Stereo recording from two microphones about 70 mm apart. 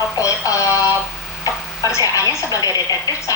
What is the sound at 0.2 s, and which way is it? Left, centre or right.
Music, left.